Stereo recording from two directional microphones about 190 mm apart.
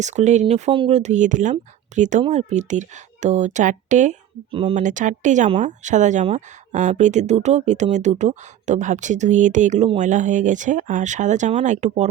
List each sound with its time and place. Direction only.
0.0 s speech: 40° right (ahead or behind)